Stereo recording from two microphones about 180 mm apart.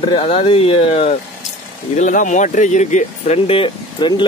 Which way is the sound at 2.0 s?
45° left (ahead or behind).